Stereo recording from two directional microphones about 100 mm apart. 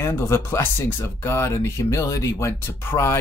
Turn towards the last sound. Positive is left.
turn(degrees=30)  # may be behind; listen again after turning